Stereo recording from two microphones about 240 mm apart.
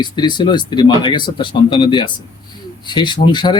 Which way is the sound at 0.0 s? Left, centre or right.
Centre.